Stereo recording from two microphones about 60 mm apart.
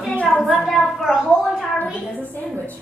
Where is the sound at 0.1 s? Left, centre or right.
Left.